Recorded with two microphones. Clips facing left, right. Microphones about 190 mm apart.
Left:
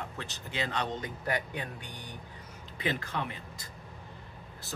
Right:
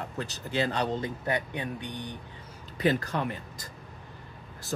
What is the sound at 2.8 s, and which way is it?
Speech, 40° right (ahead or behind).